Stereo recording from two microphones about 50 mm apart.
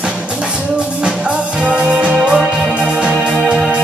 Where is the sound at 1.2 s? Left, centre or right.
Centre.